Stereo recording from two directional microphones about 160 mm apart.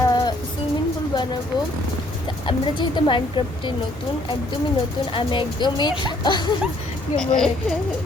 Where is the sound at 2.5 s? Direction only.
30° left (ahead or behind).